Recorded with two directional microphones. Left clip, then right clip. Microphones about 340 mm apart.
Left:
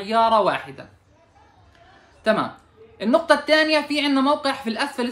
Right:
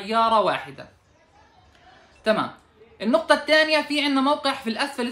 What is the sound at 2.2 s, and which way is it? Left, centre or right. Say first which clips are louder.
Speech: left 2 dB; centre.